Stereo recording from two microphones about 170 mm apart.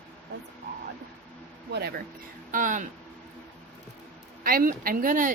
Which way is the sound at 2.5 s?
50° right (ahead or behind).